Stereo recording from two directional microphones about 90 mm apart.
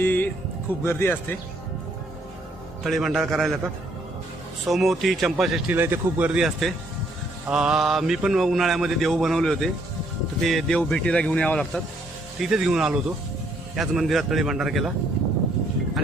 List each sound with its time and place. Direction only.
0.0 s speech: 20° left (ahead or behind)
2.8 s mantra: centre (ahead or behind)
4.6 s mantra: centre (ahead or behind)
5.6 s speech: 25° right (ahead or behind)
6.4 s mantra: centre (ahead or behind)
7.4 s mantra: 10° right (ahead or behind)
10.8 s speech: 10° left (ahead or behind)
12.4 s mantra: 5° right (ahead or behind)